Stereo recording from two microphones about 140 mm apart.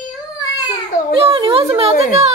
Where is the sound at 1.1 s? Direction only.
40° right (ahead or behind).